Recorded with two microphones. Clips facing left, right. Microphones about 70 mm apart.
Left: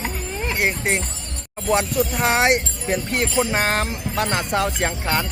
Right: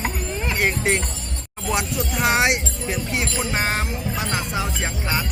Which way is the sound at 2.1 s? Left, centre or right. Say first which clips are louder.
Even; left.